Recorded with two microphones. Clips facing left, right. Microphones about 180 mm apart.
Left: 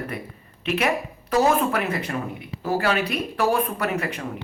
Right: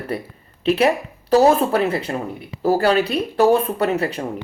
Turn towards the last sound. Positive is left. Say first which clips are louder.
# right 6 dB
turn(degrees=-30)  # may be behind; listen again after turning